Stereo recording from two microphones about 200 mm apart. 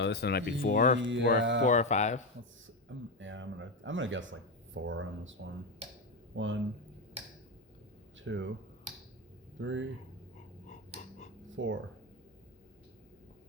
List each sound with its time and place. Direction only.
0.0 s speech: 55° left (ahead or behind)
1.0 s speech: 65° right (ahead or behind)
1.6 s speech: 35° left (ahead or behind)
3.2 s speech: 70° right (ahead or behind)
8.2 s speech: 70° right (ahead or behind)
9.6 s speech: 70° right (ahead or behind)
11.5 s speech: 70° right (ahead or behind)